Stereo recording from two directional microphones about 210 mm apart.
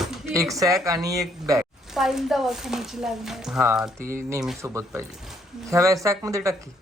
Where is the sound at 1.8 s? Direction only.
Centre (ahead or behind).